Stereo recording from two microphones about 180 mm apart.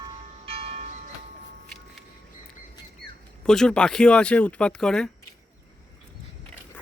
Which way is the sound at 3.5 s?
5° left (ahead or behind).